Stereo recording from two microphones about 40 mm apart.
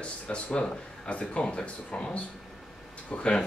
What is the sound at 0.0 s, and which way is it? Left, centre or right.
Speech, left.